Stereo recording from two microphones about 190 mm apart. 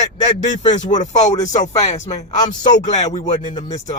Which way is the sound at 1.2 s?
20° left (ahead or behind).